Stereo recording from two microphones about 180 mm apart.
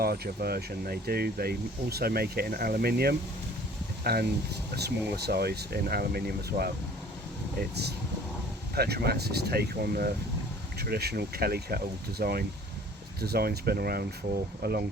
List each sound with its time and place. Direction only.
0.0 s speech: 55° right (ahead or behind)
8.7 s speech: 60° right (ahead or behind)